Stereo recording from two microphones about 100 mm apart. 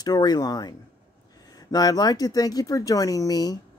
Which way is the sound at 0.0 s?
45° left (ahead or behind).